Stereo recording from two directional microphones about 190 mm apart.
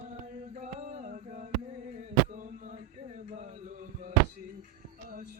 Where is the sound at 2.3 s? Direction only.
40° right (ahead or behind).